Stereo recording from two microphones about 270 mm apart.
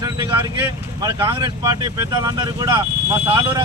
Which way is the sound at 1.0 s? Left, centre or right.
Centre.